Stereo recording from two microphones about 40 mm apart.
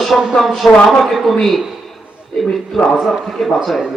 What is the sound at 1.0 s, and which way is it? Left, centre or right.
Speech, centre.